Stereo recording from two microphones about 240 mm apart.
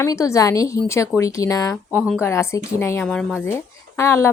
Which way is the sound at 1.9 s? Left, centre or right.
Centre.